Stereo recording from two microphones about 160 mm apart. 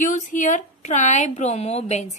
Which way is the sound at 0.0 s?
50° left (ahead or behind).